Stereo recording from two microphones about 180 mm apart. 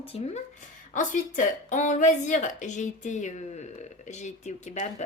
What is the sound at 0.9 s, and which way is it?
A woman's voice, 45° left (ahead or behind).